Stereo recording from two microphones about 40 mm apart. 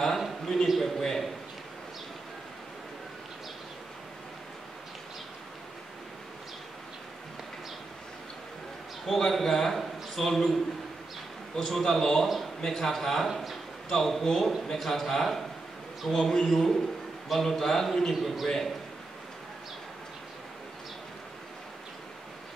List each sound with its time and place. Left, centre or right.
0.7 s speech: centre
9.0 s a man's voice: centre
16.2 s a man's voice: centre
16.4 s a man's voice: centre